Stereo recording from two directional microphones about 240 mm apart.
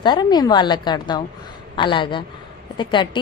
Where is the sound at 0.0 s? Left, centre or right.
Centre.